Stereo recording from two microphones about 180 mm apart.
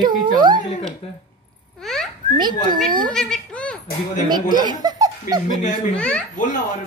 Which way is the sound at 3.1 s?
5° left (ahead or behind).